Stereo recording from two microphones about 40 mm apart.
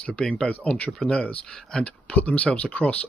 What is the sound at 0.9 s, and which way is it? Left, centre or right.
Speech, centre.